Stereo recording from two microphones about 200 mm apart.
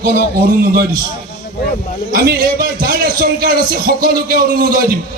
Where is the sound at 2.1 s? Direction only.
45° right (ahead or behind).